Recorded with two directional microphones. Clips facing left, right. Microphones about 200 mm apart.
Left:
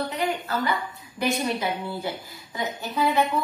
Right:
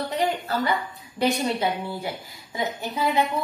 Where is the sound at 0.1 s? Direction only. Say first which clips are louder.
Right 2 dB; 35° right (ahead or behind).